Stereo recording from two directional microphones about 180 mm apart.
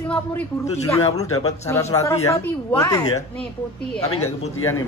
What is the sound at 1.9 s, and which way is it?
Speech, 15° left (ahead or behind).